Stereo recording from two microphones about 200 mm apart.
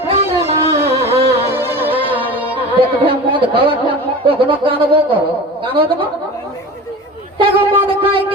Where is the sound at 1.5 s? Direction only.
10° right (ahead or behind).